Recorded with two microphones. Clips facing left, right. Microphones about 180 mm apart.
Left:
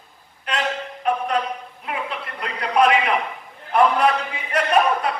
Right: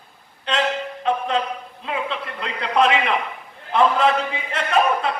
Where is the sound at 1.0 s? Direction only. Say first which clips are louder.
Even; 25° right (ahead or behind).